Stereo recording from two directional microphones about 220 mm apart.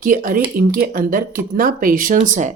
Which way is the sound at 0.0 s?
40° right (ahead or behind).